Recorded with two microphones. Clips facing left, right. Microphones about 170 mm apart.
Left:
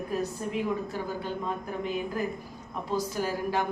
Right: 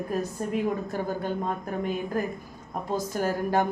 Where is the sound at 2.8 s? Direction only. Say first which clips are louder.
Right 2 dB; 50° right (ahead or behind).